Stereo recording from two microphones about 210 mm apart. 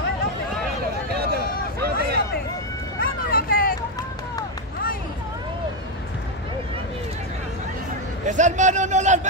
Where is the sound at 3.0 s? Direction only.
45° left (ahead or behind).